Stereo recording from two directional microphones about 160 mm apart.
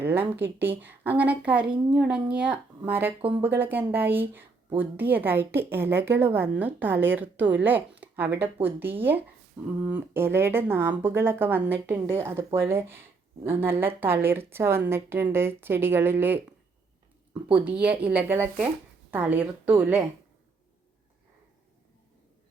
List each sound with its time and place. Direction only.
0.0 s a woman's voice: 15° right (ahead or behind)